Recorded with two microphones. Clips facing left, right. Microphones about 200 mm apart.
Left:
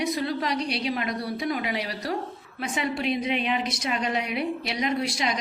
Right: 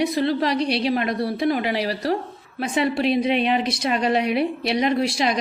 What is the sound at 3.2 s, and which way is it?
A woman's voice, 70° right (ahead or behind).